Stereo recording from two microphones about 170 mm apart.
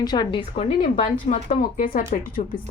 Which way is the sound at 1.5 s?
55° left (ahead or behind).